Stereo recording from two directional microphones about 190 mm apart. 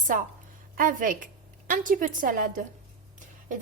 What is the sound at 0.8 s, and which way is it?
A woman's voice, 45° right (ahead or behind).